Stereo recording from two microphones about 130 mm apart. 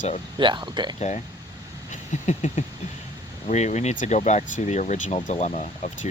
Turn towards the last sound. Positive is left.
turn(degrees=65)  # may be behind; listen again after turning